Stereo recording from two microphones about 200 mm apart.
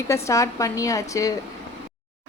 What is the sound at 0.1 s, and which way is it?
A woman's voice, 15° left (ahead or behind).